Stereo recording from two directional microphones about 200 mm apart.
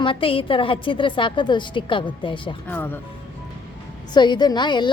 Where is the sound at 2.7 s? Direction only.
10° left (ahead or behind).